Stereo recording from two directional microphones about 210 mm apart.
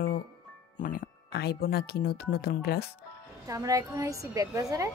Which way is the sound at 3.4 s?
15° right (ahead or behind).